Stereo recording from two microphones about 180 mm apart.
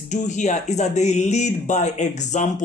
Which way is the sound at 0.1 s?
40° left (ahead or behind).